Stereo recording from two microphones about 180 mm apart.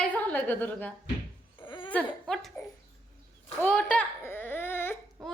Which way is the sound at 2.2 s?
Centre (ahead or behind).